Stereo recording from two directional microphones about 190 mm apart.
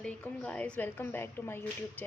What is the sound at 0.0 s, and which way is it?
A woman's voice, 5° left (ahead or behind).